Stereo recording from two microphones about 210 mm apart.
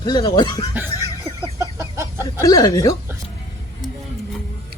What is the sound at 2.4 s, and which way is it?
Speech, 15° left (ahead or behind).